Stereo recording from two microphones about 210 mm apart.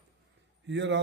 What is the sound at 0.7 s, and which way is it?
Speech, 60° right (ahead or behind).